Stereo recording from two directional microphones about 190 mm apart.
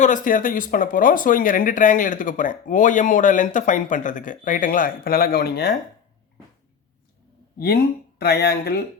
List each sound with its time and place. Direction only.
0.0 s speech: 45° left (ahead or behind); by 5.7 s 60° left (ahead or behind)
8.2 s speech: 60° left (ahead or behind)